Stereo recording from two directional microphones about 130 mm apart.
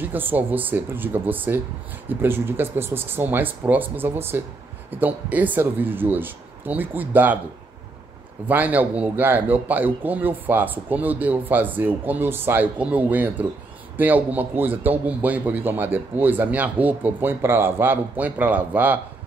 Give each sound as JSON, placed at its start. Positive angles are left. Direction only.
{"t": 0.0, "sound": "a man's voice", "side_deg": -15}
{"t": 8.5, "sound": "a man's voice", "side_deg": -15}